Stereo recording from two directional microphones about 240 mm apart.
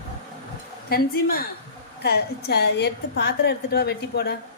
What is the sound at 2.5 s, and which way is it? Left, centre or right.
A woman's voice, left.